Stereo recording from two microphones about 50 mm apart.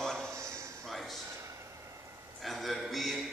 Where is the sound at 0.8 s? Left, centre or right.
Centre.